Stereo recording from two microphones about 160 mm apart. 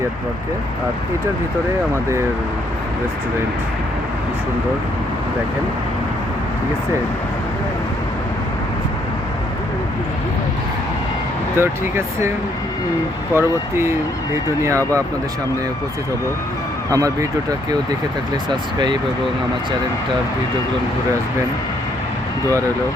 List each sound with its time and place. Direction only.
11.5 s speech: 15° right (ahead or behind)
13.3 s speech: 15° right (ahead or behind)
16.9 s speech: 20° right (ahead or behind)